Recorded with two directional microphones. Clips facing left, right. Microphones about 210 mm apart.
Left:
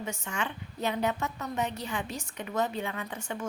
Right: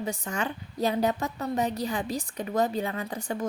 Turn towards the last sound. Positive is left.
turn(degrees=-35)  # may be behind; listen again after turning